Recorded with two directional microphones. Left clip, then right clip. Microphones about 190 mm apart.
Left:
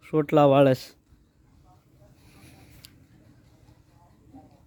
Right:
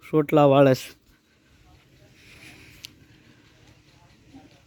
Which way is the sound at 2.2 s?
Centre (ahead or behind).